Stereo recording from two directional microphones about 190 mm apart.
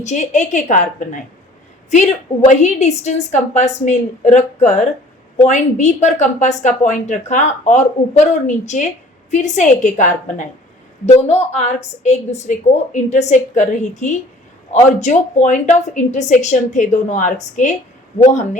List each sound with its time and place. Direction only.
0.0 s speech: 40° left (ahead or behind)